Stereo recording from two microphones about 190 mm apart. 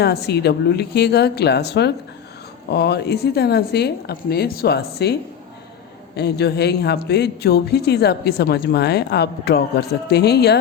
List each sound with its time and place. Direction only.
0.0 s a woman's voice: 60° left (ahead or behind)
6.1 s a woman's voice: 60° left (ahead or behind)